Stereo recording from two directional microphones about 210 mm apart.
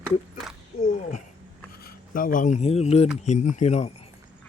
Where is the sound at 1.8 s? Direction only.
40° left (ahead or behind).